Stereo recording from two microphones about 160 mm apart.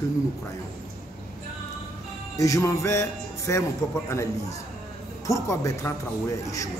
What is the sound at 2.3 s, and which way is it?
Speech, 20° left (ahead or behind).